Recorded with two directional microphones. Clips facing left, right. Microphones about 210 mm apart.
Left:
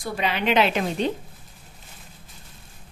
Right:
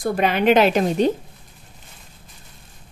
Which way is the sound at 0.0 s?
50° right (ahead or behind).